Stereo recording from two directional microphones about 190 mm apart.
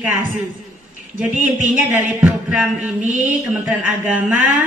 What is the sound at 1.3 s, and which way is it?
Speech, 45° right (ahead or behind).